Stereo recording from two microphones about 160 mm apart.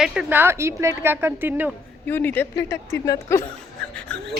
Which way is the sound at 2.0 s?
10° left (ahead or behind).